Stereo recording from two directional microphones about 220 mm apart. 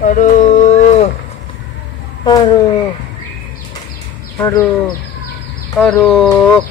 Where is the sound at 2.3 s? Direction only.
20° left (ahead or behind).